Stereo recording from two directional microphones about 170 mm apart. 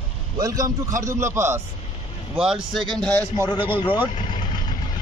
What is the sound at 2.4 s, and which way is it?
Speech, 5° right (ahead or behind).